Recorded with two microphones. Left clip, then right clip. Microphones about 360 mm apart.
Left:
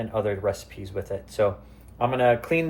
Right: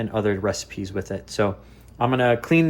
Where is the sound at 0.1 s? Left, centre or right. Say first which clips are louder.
Right 2 dB; right.